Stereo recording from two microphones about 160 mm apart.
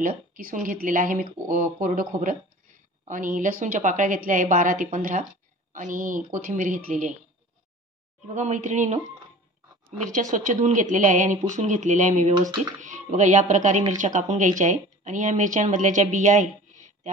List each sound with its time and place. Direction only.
0.0 s a woman's voice: 60° right (ahead or behind)
8.4 s a woman's voice: 45° right (ahead or behind)
10.1 s a woman's voice: 50° right (ahead or behind)